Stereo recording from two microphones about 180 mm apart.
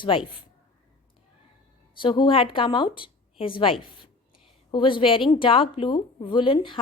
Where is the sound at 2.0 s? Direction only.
25° left (ahead or behind).